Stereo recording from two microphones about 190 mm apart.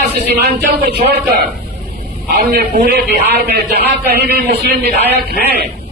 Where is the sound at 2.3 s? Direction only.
50° right (ahead or behind).